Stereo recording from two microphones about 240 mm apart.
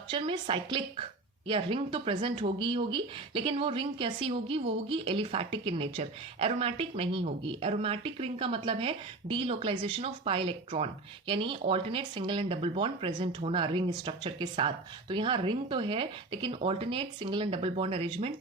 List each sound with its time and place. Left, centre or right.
0.1 s speech: right